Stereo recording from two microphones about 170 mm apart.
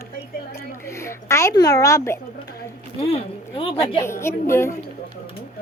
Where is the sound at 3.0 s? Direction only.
35° left (ahead or behind).